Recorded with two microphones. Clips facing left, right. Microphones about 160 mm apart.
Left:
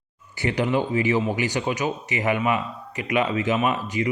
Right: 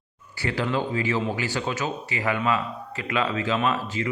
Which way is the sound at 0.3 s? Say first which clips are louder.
Left 3 dB; 20° left (ahead or behind).